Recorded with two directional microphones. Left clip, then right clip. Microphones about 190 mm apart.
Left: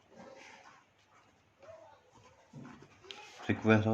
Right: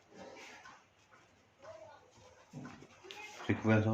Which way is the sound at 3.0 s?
55° left (ahead or behind).